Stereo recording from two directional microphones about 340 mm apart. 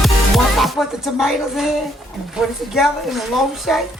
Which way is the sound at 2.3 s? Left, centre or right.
Centre.